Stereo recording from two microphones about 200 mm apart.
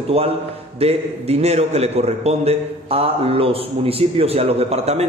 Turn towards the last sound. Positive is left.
turn(degrees=-30)  # may be behind; listen again after turning